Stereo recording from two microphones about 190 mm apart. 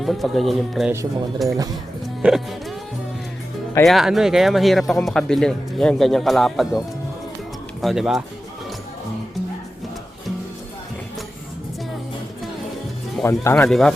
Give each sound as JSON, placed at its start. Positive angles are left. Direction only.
{"t": 0.0, "sound": "speech", "side_deg": 0}
{"t": 1.5, "sound": "speech", "side_deg": -20}
{"t": 2.2, "sound": "music", "side_deg": 0}
{"t": 3.8, "sound": "speech", "side_deg": 0}
{"t": 13.2, "sound": "speech", "side_deg": 15}
{"t": 13.6, "sound": "speech", "side_deg": 5}